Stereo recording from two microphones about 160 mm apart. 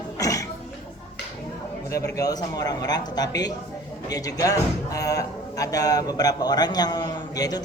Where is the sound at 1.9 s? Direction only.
20° left (ahead or behind).